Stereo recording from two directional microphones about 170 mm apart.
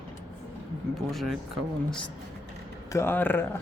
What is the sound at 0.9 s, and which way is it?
Speech, centre (ahead or behind).